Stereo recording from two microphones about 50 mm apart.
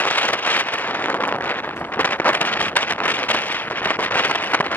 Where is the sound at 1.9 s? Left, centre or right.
Left.